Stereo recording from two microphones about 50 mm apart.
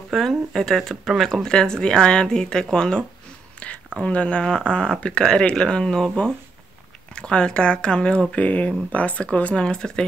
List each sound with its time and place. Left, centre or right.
0.1 s speech: centre